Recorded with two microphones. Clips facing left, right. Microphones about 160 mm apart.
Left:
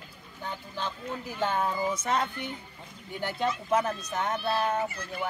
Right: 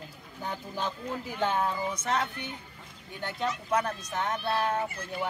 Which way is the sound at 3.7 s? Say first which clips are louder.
Even; 5° left (ahead or behind).